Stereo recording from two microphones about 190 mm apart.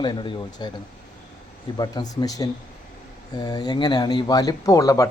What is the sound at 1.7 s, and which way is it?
Speech, 20° left (ahead or behind).